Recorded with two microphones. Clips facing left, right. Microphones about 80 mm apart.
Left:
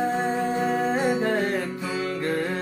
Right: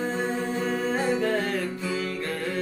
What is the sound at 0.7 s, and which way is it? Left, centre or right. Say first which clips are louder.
Music: left 1 dB; left.